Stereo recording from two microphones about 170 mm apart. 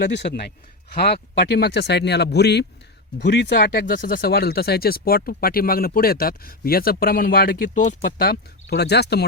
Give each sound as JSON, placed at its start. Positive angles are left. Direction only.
{"t": 0.0, "sound": "speech", "side_deg": 90}
{"t": 0.9, "sound": "speech", "side_deg": 70}
{"t": 3.2, "sound": "speech", "side_deg": 90}